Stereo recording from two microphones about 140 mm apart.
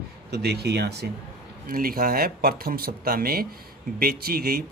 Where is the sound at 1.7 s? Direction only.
90° right.